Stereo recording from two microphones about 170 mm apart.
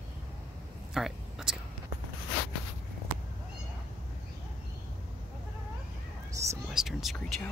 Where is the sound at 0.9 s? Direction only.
Centre (ahead or behind).